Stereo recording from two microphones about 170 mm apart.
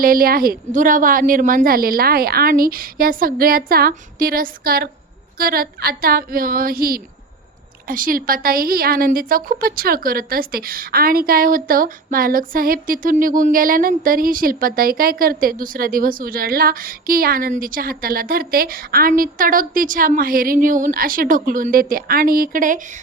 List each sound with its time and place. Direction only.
0.0 s a woman's voice: 60° right (ahead or behind)